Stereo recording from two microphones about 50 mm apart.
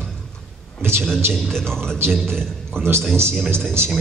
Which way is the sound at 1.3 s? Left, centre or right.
Centre.